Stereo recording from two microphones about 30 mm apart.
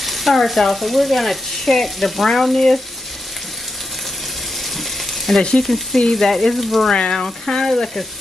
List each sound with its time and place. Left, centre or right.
0.0 s frying: centre
5.3 s frying: centre
6.9 s speech: left
7.2 s frying: centre